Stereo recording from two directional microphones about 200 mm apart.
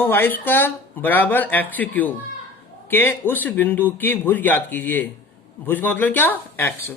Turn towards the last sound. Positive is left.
turn(degrees=10)  # may be behind; listen again after turning